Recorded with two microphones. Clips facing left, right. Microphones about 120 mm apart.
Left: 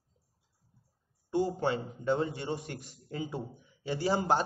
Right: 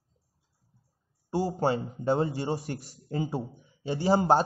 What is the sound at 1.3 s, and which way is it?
A man's voice, 35° right (ahead or behind).